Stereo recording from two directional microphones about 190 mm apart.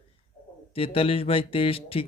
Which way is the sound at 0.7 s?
30° left (ahead or behind).